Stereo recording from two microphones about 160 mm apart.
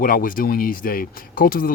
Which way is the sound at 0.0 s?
60° left (ahead or behind).